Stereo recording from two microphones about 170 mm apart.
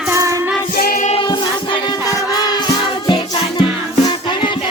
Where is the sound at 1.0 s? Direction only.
30° left (ahead or behind).